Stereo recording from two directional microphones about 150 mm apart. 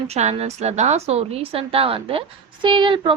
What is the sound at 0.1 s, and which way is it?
A woman's voice, 45° right (ahead or behind).